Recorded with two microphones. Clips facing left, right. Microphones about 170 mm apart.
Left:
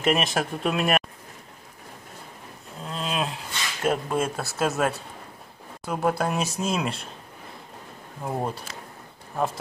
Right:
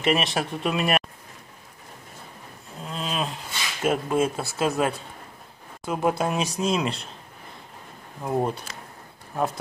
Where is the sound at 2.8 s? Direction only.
Centre (ahead or behind).